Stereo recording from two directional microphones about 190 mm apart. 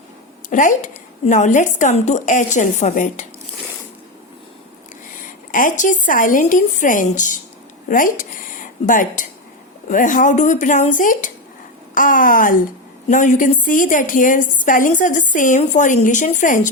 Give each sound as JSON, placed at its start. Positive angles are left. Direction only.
{"t": 0.5, "sound": "speech", "side_deg": 40}
{"t": 5.2, "sound": "a woman's voice", "side_deg": 45}